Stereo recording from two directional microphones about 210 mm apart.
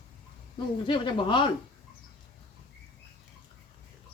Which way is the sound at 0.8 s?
25° left (ahead or behind).